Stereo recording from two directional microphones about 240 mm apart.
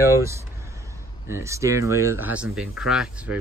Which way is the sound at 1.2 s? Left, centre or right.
Centre.